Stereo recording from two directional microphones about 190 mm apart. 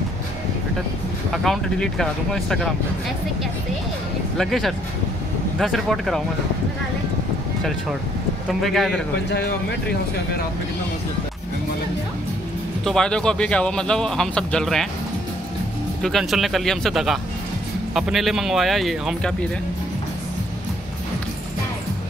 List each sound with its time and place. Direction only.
1.3 s speech: centre (ahead or behind)
4.4 s speech: centre (ahead or behind)
8.5 s speech: centre (ahead or behind)
9.3 s speech: 60° left (ahead or behind)
12.8 s speech: 5° left (ahead or behind)
16.0 s speech: centre (ahead or behind)